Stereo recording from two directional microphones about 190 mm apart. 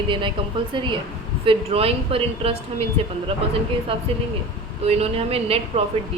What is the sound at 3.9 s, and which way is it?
A woman's voice, 30° right (ahead or behind).